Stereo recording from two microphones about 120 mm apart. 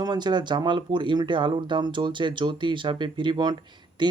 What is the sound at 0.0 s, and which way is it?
Speech, 35° right (ahead or behind).